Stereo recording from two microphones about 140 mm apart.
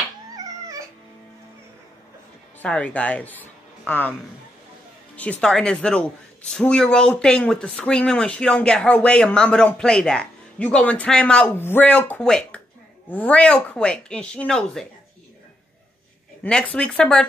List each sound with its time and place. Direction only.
0.4 s dog: 25° right (ahead or behind)
2.6 s a man's voice: 10° left (ahead or behind)
5.1 s speech: 10° left (ahead or behind)
16.4 s speech: 5° left (ahead or behind)